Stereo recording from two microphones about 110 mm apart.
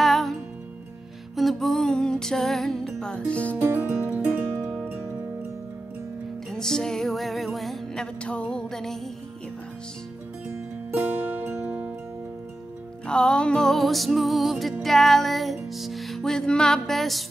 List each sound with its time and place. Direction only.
0.0 s music: centre (ahead or behind)
3.6 s music: 20° right (ahead or behind)
4.5 s music: 25° right (ahead or behind)
6.5 s music: 5° left (ahead or behind)
10.9 s music: 15° right (ahead or behind)
13.0 s music: 10° left (ahead or behind)